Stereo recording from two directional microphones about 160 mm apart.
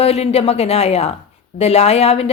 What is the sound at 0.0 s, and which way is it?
Speech, 40° left (ahead or behind).